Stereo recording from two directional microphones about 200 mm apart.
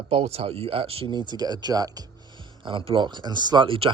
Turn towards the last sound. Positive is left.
turn(degrees=-25)  # may be behind; listen again after turning